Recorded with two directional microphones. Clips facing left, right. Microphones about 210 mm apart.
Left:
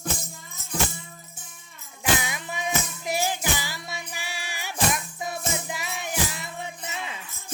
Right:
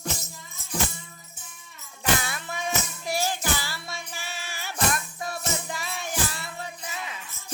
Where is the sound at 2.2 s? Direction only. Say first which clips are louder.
Left 1 dB; 15° left (ahead or behind).